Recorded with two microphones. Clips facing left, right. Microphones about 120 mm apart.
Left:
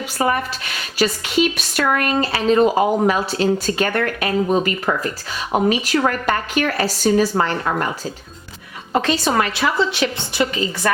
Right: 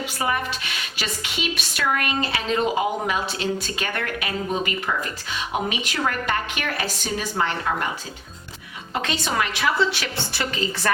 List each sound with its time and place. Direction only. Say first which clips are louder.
0.2 s speech: left 6 dB; 40° left (ahead or behind)
8.9 s speech: left 8 dB; 40° left (ahead or behind)
10.0 s a woman's voice: left 8 dB; 20° left (ahead or behind)